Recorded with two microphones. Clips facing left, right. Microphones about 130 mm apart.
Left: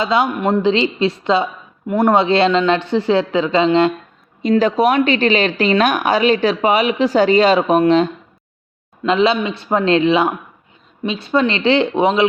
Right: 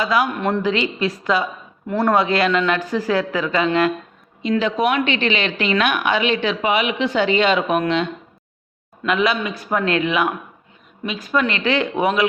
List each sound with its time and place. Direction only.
0.0 s a man's voice: 25° left (ahead or behind)
4.4 s a woman's voice: 40° left (ahead or behind)
9.0 s a man's voice: 25° left (ahead or behind)